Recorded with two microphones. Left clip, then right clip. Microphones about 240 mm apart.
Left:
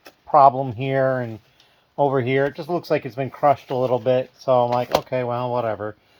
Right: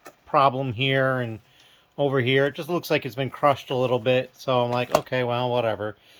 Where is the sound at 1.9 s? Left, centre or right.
Centre.